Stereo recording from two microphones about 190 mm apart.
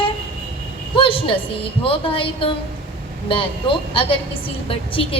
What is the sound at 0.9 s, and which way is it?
A woman's voice, 30° left (ahead or behind).